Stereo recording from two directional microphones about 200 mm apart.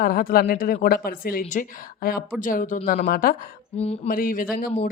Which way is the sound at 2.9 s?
45° left (ahead or behind).